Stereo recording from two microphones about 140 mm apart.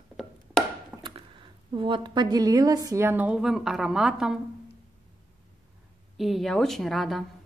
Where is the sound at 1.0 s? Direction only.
35° right (ahead or behind); by 4.4 s 5° right (ahead or behind).